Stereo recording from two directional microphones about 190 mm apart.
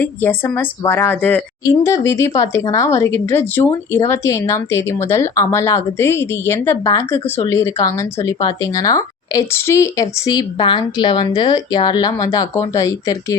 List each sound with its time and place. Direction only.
0.0 s a woman's voice: 10° left (ahead or behind)